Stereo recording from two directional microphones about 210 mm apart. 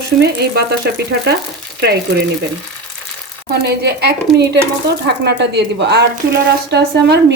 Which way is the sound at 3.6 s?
50° right (ahead or behind).